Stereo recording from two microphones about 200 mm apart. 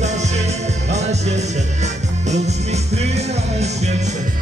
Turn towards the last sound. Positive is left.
turn(degrees=-35)  # may be behind; listen again after turning